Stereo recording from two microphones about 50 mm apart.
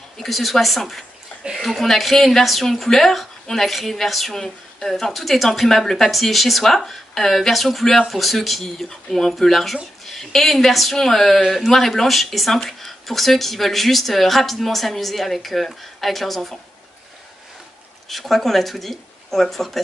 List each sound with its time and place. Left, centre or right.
0.2 s speech: centre
18.0 s speech: centre